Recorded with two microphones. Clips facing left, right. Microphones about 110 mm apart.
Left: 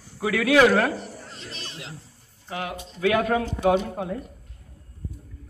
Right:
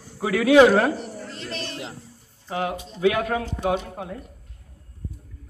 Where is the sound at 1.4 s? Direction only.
70° right (ahead or behind).